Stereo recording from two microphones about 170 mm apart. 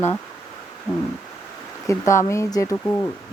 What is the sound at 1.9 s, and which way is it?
Speech, 15° left (ahead or behind).